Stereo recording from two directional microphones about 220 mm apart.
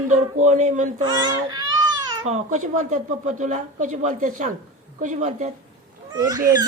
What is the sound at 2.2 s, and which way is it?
Speech, 30° right (ahead or behind).